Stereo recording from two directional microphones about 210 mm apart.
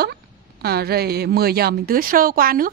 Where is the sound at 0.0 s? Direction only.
50° right (ahead or behind).